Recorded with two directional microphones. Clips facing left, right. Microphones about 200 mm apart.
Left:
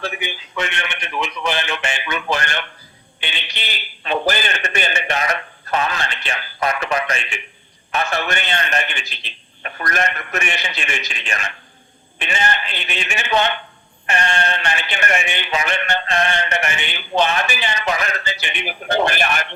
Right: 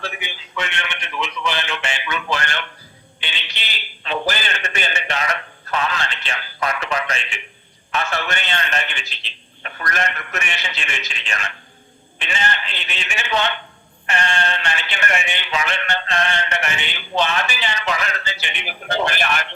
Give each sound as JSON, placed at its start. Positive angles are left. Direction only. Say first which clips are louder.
{"t": 0.0, "sound": "speech", "louder": "left 4 dB", "side_deg": 50}